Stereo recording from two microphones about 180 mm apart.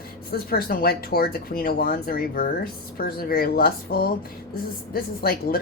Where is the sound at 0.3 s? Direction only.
55° left (ahead or behind).